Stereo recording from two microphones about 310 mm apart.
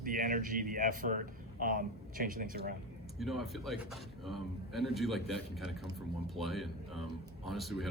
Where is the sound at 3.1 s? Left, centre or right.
Centre.